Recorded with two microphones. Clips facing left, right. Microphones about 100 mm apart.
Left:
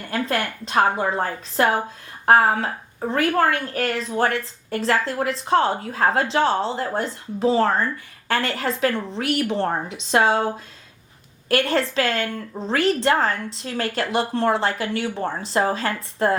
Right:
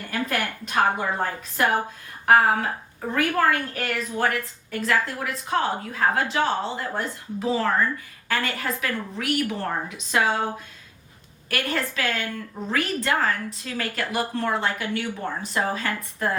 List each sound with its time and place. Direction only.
0.1 s a woman's voice: 30° left (ahead or behind)
11.5 s a woman's voice: 30° left (ahead or behind)